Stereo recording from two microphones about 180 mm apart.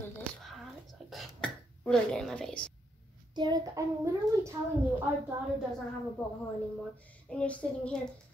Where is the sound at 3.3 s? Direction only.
20° right (ahead or behind).